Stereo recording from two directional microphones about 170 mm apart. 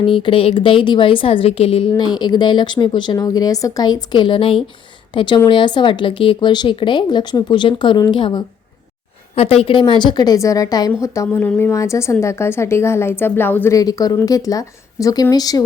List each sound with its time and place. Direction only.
0.1 s a woman's voice: 30° left (ahead or behind)